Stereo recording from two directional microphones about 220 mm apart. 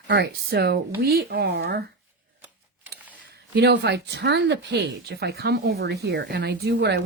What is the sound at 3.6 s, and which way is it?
Speech, 50° right (ahead or behind).